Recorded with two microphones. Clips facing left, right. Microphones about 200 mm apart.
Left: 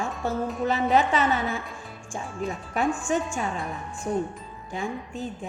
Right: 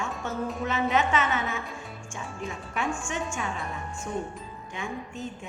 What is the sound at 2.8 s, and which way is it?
Speech, 35° left (ahead or behind).